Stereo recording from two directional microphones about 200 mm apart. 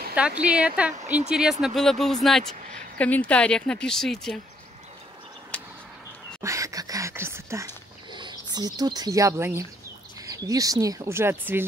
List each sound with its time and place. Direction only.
0.4 s speech: 5° right (ahead or behind)
5.5 s a sound: 5° left (ahead or behind)
6.4 s speech: 15° right (ahead or behind)